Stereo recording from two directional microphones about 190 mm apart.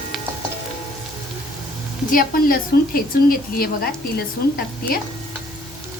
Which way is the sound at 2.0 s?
50° left (ahead or behind).